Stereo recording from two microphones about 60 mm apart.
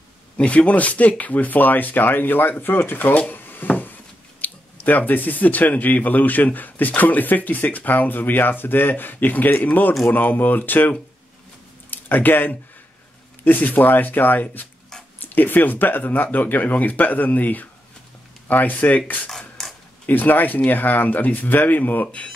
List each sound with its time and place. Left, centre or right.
0.4 s speech: left
19.2 s mechanisms: centre
20.1 s speech: left